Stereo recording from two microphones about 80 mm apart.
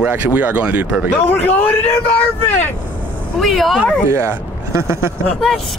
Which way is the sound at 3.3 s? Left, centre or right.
Centre.